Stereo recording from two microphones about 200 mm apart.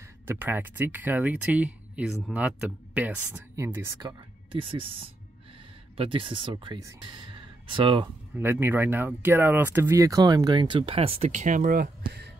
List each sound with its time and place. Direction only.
0.3 s speech: 10° right (ahead or behind)
4.5 s speech: 25° right (ahead or behind)
8.4 s speech: 10° right (ahead or behind); by 11.9 s 45° right (ahead or behind)